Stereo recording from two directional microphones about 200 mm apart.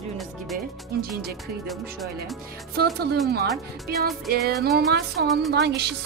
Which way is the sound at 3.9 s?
50° right (ahead or behind).